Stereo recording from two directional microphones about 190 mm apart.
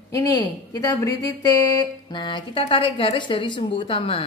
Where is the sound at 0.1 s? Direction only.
20° left (ahead or behind).